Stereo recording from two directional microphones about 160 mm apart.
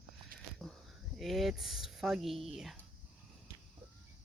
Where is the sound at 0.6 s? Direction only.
Centre (ahead or behind).